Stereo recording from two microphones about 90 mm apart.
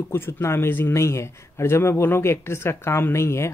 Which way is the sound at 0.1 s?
25° left (ahead or behind).